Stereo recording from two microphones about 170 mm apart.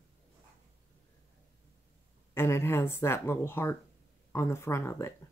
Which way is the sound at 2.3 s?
15° left (ahead or behind).